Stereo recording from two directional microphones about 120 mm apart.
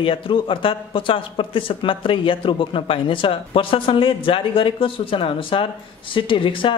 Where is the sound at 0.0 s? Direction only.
45° left (ahead or behind).